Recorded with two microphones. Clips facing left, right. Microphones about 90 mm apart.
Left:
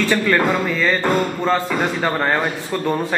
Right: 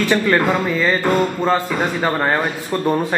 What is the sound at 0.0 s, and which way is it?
Speech, 15° right (ahead or behind).